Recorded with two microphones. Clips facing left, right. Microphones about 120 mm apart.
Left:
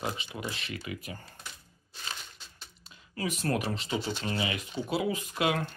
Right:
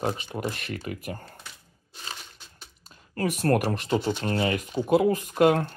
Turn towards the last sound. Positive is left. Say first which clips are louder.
# right 9 dB
turn(degrees=-45)  # may be behind; listen again after turning